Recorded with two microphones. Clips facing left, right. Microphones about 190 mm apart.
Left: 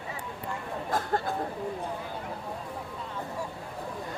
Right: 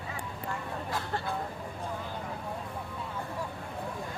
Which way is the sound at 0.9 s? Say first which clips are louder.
Left 7 dB; 45° left (ahead or behind).